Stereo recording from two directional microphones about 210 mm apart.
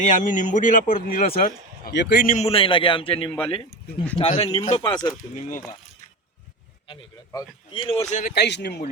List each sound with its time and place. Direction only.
0.0 s a man's voice: 40° left (ahead or behind)
2.3 s a man's voice: 30° left (ahead or behind)
5.3 s a man's voice: 35° left (ahead or behind)
6.8 s a man's voice: 25° left (ahead or behind)
8.3 s speech: 55° left (ahead or behind)